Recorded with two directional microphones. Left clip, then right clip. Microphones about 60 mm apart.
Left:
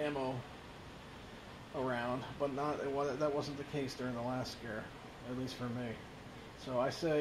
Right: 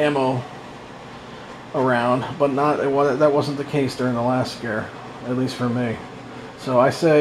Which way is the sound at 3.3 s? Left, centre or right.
Left.